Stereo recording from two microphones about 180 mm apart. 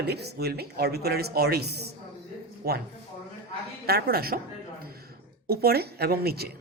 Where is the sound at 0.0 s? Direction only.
65° right (ahead or behind).